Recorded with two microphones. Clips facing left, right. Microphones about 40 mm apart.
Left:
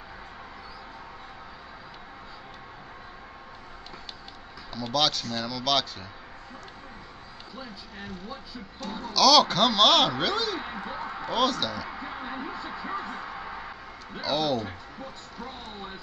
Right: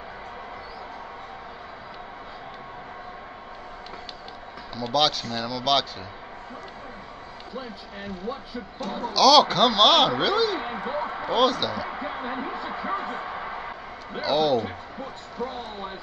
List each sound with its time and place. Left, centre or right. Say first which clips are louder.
4.7 s speech: right 3 dB; centre
8.8 s speech: right 5 dB; right
9.1 s speech: right 3 dB; centre
10.6 s a man's voice: right 6 dB; right
11.3 s speech: right 4 dB; centre
11.9 s a sound: right 5 dB; right
14.2 s speech: right 5 dB; centre
15.4 s speech: right 7 dB; right